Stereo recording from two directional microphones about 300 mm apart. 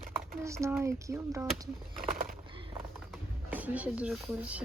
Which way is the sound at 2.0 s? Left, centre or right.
Right.